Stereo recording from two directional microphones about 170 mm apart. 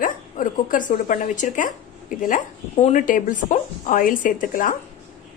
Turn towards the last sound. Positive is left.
turn(degrees=50)  # may be behind; listen again after turning